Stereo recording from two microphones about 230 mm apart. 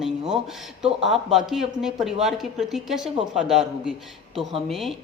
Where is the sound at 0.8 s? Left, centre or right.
Centre.